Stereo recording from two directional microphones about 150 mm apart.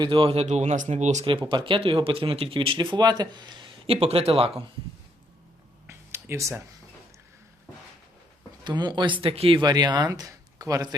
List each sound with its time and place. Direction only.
0.0 s speech: 35° right (ahead or behind)
1.2 s speech: 35° right (ahead or behind)
5.9 s a sound: 15° right (ahead or behind)
8.6 s speech: 30° right (ahead or behind)